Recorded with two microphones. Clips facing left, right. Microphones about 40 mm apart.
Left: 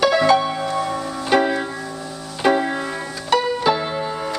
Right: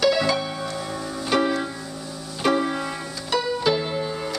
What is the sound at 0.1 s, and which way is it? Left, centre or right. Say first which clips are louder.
Music: left 7 dB; left.